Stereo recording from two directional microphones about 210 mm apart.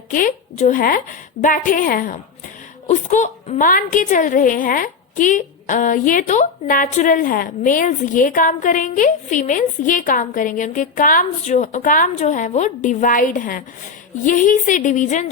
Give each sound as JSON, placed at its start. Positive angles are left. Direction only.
{"t": 0.1, "sound": "a woman's voice", "side_deg": 40}